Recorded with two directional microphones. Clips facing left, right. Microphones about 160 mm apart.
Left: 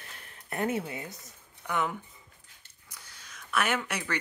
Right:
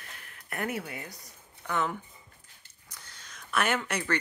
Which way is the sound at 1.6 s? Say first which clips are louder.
Even; 10° left (ahead or behind).